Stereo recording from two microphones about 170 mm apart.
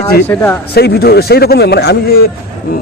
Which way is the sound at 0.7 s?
70° left (ahead or behind).